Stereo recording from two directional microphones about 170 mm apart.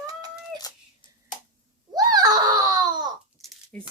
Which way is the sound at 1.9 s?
25° right (ahead or behind).